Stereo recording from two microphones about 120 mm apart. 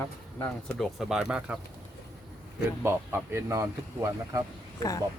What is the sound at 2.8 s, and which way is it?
Speech, 20° right (ahead or behind).